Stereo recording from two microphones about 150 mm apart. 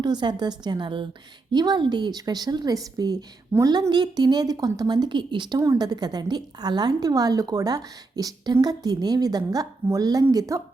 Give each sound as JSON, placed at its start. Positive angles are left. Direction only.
{"t": 0.0, "sound": "a woman's voice", "side_deg": -30}